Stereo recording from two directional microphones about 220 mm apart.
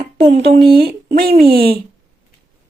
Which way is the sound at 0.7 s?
45° right (ahead or behind).